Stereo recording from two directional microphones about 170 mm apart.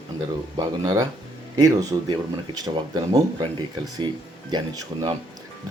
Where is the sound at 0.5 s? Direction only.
25° right (ahead or behind).